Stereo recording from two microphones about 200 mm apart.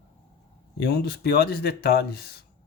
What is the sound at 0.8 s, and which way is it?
Speech, 55° left (ahead or behind).